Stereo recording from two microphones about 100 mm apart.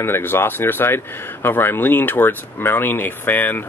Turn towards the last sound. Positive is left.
turn(degrees=20)  # may be behind; listen again after turning